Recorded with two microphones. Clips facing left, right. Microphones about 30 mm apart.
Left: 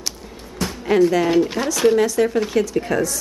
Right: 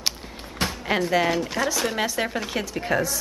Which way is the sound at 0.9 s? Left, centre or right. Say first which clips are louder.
Left 10 dB; centre.